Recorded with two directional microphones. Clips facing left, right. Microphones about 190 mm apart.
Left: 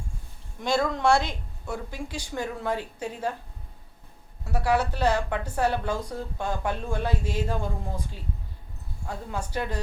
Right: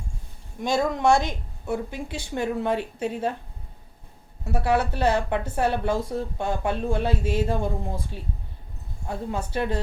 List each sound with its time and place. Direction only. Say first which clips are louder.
0.6 s speech: right 2 dB; 15° right (ahead or behind)
4.6 s speech: right 1 dB; 20° right (ahead or behind)
9.0 s speech: right 4 dB; 20° right (ahead or behind)